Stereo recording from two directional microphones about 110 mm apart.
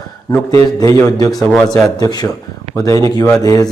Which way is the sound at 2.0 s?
35° left (ahead or behind).